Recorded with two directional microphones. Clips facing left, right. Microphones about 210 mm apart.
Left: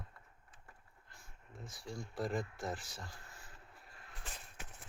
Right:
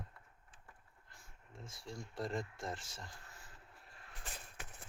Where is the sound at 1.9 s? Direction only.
5° left (ahead or behind).